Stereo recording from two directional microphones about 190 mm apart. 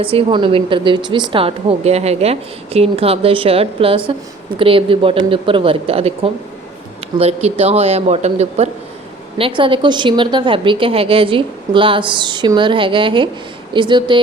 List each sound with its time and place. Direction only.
0.0 s a woman's voice: 30° right (ahead or behind)